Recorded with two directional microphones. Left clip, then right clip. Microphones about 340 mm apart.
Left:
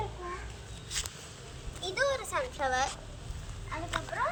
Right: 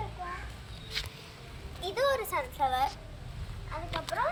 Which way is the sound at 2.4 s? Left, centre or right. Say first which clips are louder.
Right 1 dB; right.